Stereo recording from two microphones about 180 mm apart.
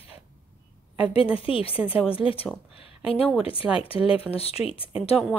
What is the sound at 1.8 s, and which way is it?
Speech, 5° right (ahead or behind).